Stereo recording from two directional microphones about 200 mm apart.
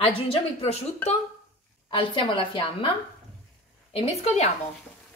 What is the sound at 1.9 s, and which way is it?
A woman's voice, 25° left (ahead or behind).